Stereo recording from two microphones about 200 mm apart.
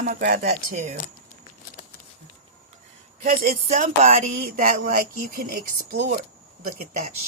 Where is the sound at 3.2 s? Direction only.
45° right (ahead or behind).